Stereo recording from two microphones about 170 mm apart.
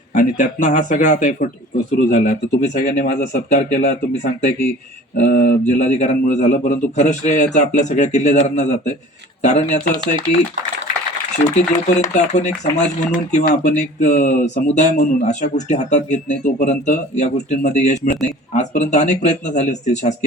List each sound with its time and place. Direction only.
0.1 s speech: 45° left (ahead or behind)
5.1 s speech: 55° left (ahead or behind)
12.1 s speech: 45° left (ahead or behind)